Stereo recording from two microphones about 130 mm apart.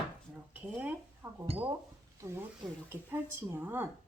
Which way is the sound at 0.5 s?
15° right (ahead or behind).